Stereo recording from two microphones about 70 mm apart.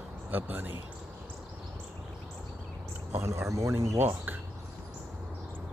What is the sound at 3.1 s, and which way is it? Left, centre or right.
Speech, right.